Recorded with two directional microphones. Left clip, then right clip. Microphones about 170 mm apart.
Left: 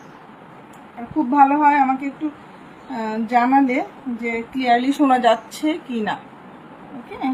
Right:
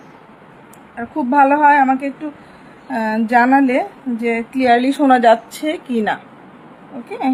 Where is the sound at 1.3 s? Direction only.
65° right (ahead or behind); by 6.1 s 50° right (ahead or behind).